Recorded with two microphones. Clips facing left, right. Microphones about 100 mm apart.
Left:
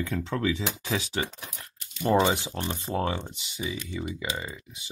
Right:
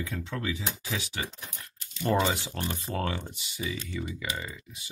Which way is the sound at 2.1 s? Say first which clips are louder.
Left 4 dB; 20° left (ahead or behind).